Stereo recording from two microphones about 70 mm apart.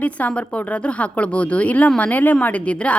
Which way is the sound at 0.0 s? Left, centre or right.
Centre.